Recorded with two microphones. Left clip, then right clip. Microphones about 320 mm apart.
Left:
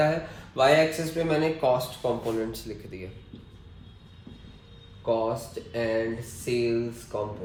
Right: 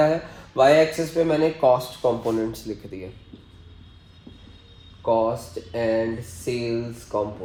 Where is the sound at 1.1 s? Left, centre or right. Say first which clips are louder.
Right 6 dB; centre.